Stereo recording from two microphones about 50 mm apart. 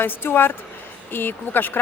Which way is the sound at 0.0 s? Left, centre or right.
Left.